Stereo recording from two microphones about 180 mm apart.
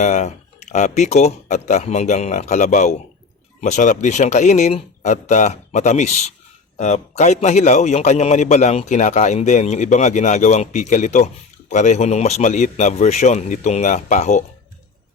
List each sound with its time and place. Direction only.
0.0 s a man's voice: 40° left (ahead or behind)